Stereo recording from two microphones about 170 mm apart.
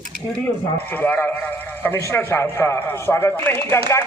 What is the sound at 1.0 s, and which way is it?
A man's voice, 10° left (ahead or behind).